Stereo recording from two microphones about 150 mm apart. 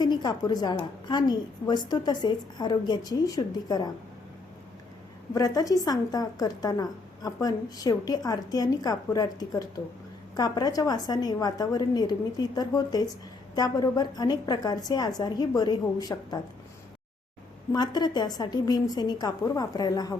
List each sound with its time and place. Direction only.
0.0 s speech: 30° left (ahead or behind)
5.3 s speech: 25° left (ahead or behind)
17.7 s speech: 30° left (ahead or behind)